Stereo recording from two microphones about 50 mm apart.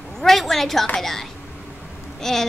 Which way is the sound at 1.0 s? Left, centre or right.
Centre.